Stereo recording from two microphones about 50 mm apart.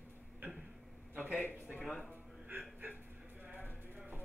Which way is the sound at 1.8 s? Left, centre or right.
Centre.